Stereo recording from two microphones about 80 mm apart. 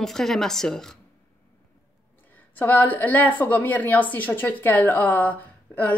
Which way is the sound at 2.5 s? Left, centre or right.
Left.